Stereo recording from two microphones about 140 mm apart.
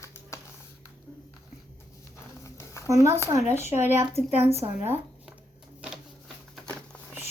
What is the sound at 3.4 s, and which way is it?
Speech, 15° right (ahead or behind).